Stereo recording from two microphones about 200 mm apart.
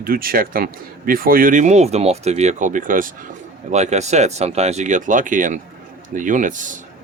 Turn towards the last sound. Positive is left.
turn(degrees=-40)  # may be behind; listen again after turning